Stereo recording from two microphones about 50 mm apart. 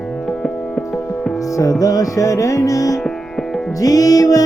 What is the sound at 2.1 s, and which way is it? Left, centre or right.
Music, left.